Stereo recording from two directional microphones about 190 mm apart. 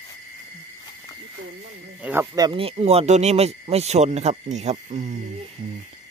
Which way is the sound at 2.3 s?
25° right (ahead or behind).